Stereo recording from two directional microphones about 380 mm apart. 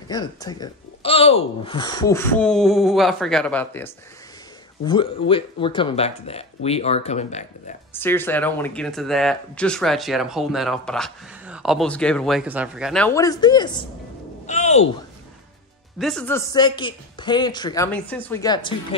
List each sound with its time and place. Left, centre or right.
0.1 s speech: centre
7.9 s speech: centre
14.4 s a sound: centre
16.0 s speech: centre